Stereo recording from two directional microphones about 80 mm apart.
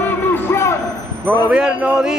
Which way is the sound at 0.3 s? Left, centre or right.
Left.